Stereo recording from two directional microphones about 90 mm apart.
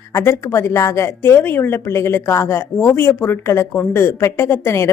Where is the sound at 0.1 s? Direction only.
30° left (ahead or behind).